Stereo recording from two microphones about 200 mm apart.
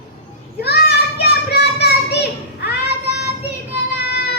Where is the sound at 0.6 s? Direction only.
55° left (ahead or behind).